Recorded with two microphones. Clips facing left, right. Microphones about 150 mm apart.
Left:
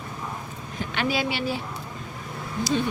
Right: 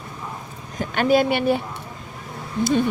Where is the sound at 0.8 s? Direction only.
50° right (ahead or behind).